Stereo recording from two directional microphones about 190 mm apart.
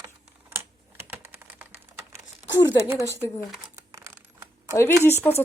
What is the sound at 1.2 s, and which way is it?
Typing, 10° right (ahead or behind).